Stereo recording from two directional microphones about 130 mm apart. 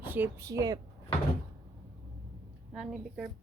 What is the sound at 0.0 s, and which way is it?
Speech, 15° right (ahead or behind).